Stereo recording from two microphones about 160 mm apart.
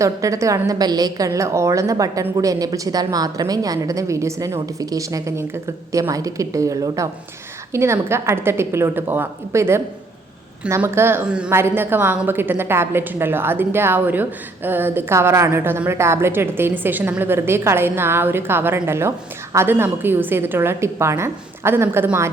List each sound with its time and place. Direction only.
0.0 s a woman's voice: 20° right (ahead or behind)